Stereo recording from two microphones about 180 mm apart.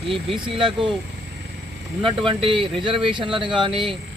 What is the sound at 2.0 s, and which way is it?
A man's voice, 30° right (ahead or behind).